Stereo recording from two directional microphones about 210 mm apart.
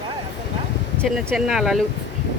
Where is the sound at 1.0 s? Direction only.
Centre (ahead or behind).